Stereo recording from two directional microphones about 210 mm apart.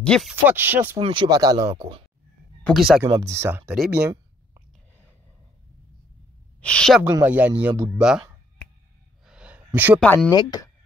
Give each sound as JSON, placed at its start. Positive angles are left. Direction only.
{"t": 0.0, "sound": "speech", "side_deg": 0}
{"t": 0.9, "sound": "speech", "side_deg": -25}
{"t": 2.6, "sound": "speech", "side_deg": 0}
{"t": 3.1, "sound": "speech", "side_deg": -15}
{"t": 6.6, "sound": "speech", "side_deg": 5}
{"t": 9.2, "sound": "gasp", "side_deg": -5}
{"t": 9.9, "sound": "speech", "side_deg": 5}
{"t": 10.3, "sound": "speech", "side_deg": 20}